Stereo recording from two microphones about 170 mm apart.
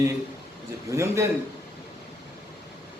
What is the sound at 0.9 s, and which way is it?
Speech, 15° right (ahead or behind).